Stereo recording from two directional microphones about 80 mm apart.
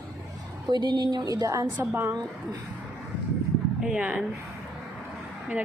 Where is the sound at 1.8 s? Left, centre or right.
Right.